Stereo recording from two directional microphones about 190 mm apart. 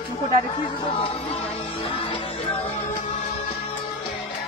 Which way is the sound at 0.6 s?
30° left (ahead or behind).